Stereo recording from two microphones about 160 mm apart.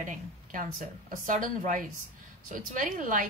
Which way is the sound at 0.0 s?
55° right (ahead or behind).